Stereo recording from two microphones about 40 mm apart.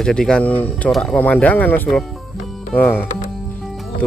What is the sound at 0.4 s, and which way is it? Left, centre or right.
Speech, left.